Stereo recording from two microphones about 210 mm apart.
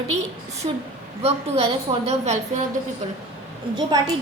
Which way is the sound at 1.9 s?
20° right (ahead or behind).